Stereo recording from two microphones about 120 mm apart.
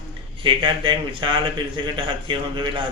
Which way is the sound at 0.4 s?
45° right (ahead or behind).